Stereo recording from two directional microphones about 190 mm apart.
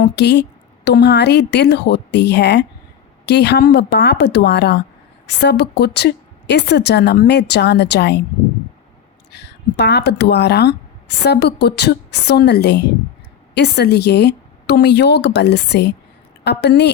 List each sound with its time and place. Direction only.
0.2 s a woman's voice: 65° left (ahead or behind)
9.3 s a woman's voice: 60° left (ahead or behind)